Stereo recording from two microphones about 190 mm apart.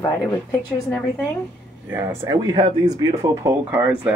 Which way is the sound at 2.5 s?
30° right (ahead or behind).